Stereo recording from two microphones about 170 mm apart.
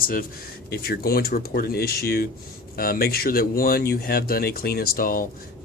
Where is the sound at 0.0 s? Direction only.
55° left (ahead or behind).